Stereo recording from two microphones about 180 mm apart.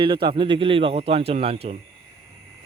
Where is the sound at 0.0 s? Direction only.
30° right (ahead or behind).